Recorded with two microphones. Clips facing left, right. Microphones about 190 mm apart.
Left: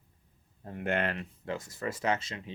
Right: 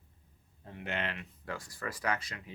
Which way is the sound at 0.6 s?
50° left (ahead or behind).